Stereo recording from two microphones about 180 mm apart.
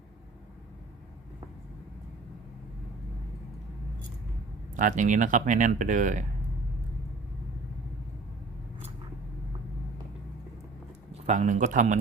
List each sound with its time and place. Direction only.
4.7 s speech: 45° right (ahead or behind)
11.3 s speech: 45° right (ahead or behind)